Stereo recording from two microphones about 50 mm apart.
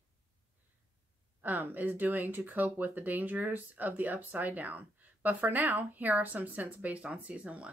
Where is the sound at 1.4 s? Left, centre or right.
Right.